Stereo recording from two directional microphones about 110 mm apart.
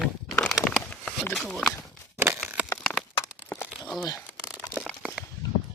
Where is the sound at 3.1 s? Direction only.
25° left (ahead or behind).